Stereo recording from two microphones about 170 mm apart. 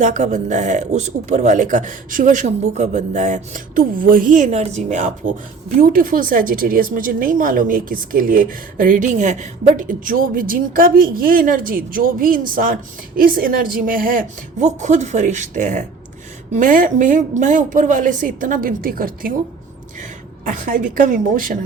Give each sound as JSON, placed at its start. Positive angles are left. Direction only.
{"t": 0.0, "sound": "a woman's voice", "side_deg": -45}